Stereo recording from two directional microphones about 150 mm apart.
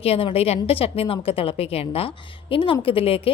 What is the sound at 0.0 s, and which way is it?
Speech, 40° left (ahead or behind).